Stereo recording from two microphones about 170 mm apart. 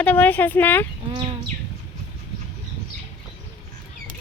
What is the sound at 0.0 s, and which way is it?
Speech, 10° left (ahead or behind).